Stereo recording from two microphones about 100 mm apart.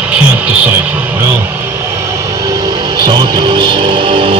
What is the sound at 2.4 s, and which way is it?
Music, 45° right (ahead or behind).